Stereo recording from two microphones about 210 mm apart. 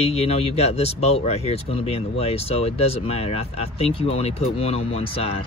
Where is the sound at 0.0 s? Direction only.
30° left (ahead or behind).